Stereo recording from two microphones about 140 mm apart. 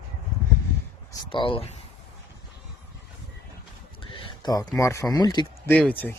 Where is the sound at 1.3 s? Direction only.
40° left (ahead or behind).